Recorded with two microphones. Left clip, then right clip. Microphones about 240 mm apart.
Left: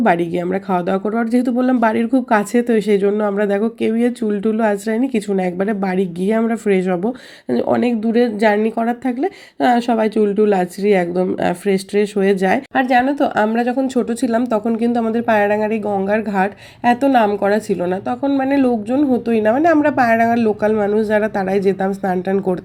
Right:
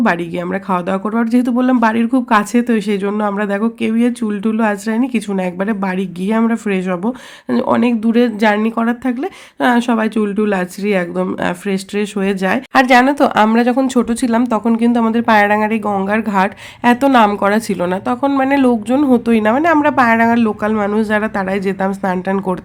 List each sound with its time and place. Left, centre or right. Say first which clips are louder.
0.0 s speech: left 1 dB; centre
12.7 s speech: right 9 dB; right